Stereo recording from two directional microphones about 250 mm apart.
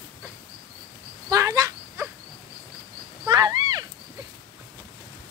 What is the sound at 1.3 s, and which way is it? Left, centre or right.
Fowl, centre.